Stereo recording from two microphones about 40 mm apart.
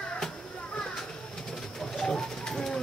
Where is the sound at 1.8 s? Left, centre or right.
Centre.